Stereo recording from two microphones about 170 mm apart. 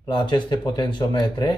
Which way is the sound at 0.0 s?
25° left (ahead or behind).